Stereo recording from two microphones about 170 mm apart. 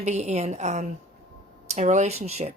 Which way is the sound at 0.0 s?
40° right (ahead or behind).